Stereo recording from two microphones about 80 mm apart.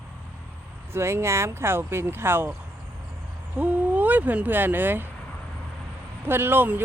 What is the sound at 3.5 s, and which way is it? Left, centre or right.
Speech, right.